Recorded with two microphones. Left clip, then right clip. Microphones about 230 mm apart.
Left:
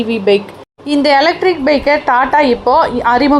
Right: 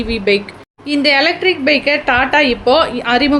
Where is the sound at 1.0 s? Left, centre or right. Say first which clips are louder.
Left 2 dB; centre.